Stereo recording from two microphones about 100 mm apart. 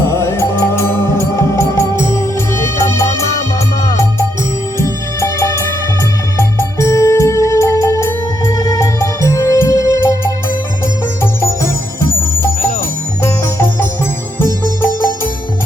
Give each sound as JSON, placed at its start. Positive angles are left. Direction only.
{"t": 0.0, "sound": "music", "side_deg": 30}
{"t": 4.8, "sound": "music", "side_deg": 30}
{"t": 11.2, "sound": "music", "side_deg": 25}